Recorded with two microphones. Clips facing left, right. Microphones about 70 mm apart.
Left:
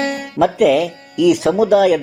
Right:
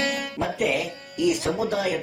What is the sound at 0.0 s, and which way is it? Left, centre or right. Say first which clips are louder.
Music: left 5 dB; left.